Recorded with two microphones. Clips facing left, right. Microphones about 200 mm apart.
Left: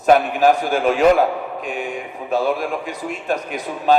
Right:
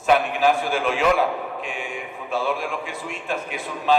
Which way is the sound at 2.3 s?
40° left (ahead or behind).